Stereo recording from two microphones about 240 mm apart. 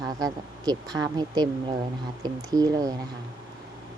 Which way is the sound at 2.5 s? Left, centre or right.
Centre.